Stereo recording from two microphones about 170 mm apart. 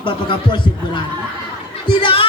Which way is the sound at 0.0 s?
30° left (ahead or behind).